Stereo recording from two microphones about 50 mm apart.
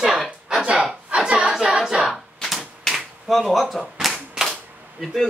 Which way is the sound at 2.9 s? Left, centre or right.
Centre.